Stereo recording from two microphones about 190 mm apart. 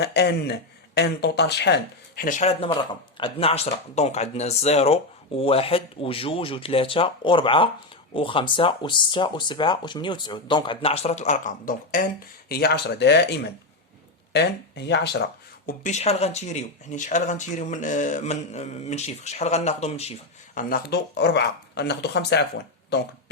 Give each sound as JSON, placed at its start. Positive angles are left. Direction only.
{"t": 0.0, "sound": "speech", "side_deg": 65}
{"t": 15.6, "sound": "speech", "side_deg": 40}
{"t": 20.6, "sound": "speech", "side_deg": 50}